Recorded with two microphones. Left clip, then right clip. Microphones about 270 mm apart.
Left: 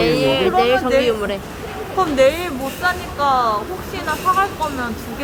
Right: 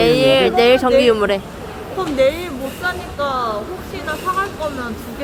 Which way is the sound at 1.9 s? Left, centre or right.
Centre.